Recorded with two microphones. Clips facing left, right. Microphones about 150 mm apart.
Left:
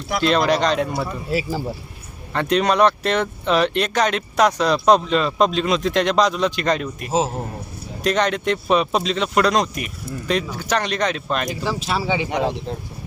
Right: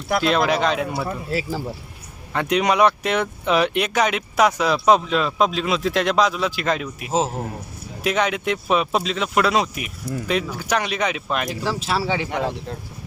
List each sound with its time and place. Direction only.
0.2 s speech: 5° right (ahead or behind)
12.3 s speech: 20° left (ahead or behind)